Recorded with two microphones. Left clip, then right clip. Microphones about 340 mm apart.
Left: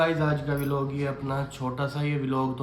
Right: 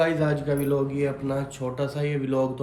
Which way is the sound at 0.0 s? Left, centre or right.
Centre.